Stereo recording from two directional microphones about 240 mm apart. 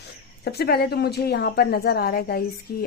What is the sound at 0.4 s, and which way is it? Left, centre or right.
A woman's voice, left.